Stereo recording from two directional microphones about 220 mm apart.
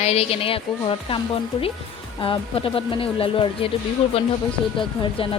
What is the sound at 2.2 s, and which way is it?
Speech, 25° left (ahead or behind).